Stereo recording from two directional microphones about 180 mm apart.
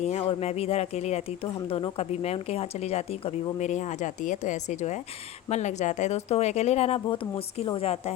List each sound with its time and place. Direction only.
0.0 s speech: 35° left (ahead or behind)